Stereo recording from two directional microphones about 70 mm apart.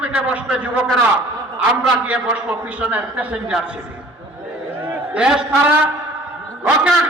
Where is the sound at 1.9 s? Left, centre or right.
Centre.